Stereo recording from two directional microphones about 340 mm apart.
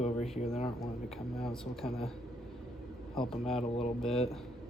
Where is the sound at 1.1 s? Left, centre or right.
Centre.